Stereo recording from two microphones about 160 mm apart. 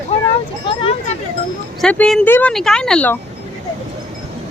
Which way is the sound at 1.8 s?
5° left (ahead or behind).